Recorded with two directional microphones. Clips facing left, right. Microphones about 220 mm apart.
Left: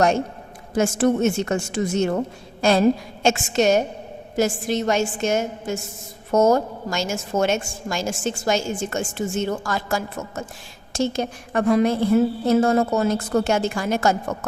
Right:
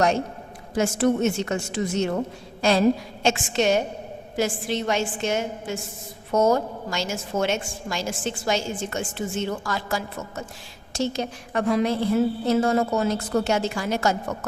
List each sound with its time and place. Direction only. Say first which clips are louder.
0.7 s a woman's voice: left 2 dB; 45° left (ahead or behind)